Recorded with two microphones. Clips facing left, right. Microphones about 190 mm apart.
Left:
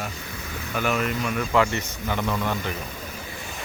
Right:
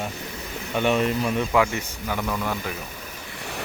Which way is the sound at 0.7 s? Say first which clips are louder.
Right 4 dB; 30° right (ahead or behind).